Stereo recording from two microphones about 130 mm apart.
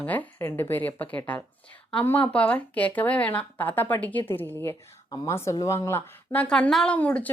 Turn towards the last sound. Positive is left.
turn(degrees=10)  # may be behind; listen again after turning